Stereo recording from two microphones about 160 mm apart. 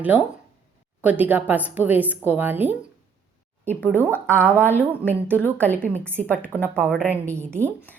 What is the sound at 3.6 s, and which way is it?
A woman's voice, 10° left (ahead or behind).